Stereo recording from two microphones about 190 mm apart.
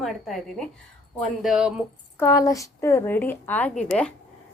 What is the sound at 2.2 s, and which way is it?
A woman's voice, 15° left (ahead or behind).